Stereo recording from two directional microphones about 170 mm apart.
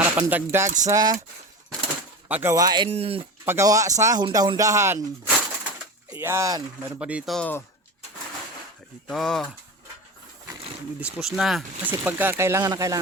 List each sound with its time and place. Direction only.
0.0 s speech: 10° right (ahead or behind)
2.2 s speech: 10° right (ahead or behind)
2.9 s speech: 35° right (ahead or behind)
3.4 s speech: 15° right (ahead or behind)
6.2 s speech: 15° right (ahead or behind)
7.0 s speech: 5° right (ahead or behind)
9.0 s speech: centre (ahead or behind)
11.0 s speech: 5° right (ahead or behind); by 13.0 s 20° right (ahead or behind)